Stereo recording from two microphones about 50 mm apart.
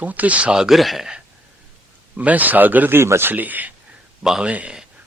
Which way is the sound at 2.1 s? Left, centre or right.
Right.